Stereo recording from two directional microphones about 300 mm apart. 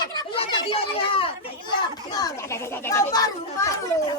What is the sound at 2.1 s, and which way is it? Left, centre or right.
Speech, centre.